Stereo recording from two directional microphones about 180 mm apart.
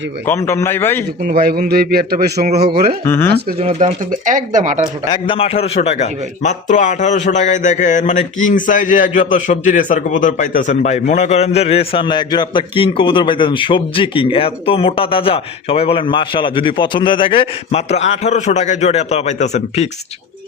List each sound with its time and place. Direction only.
0.3 s a man's voice: 15° left (ahead or behind)
1.2 s speech: 60° right (ahead or behind)
3.0 s a man's voice: 15° left (ahead or behind)
3.6 s speech: 35° right (ahead or behind)
5.0 s a man's voice: 25° left (ahead or behind)